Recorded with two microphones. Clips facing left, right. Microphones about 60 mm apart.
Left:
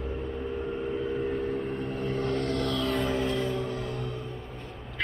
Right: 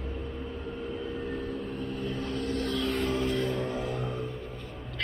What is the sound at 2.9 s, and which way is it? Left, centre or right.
Music, centre.